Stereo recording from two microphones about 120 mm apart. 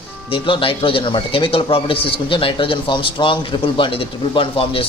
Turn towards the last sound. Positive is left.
turn(degrees=50)  # may be behind; listen again after turning